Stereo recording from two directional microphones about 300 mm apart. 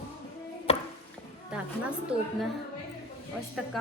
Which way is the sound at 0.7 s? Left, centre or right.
Centre.